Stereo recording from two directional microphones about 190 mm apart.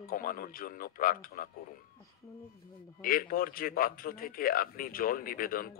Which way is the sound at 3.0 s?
50° left (ahead or behind).